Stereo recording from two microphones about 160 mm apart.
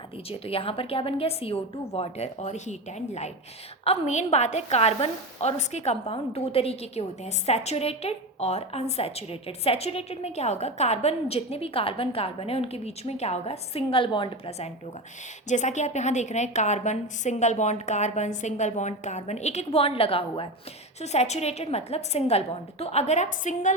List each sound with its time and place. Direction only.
0.3 s a woman's voice: 35° left (ahead or behind)
15.4 s a woman's voice: 50° left (ahead or behind)